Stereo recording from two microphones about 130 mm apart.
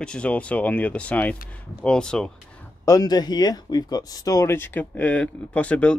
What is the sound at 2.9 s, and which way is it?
Speech, 30° left (ahead or behind).